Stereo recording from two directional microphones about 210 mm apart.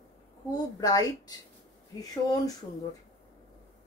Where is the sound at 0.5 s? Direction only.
15° left (ahead or behind).